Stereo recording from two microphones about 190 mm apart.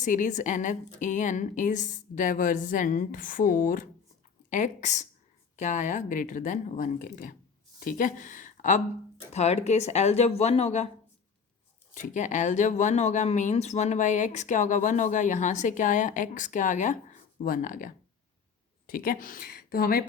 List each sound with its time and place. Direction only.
0.0 s a woman's voice: 40° left (ahead or behind)
11.9 s a woman's voice: 40° left (ahead or behind)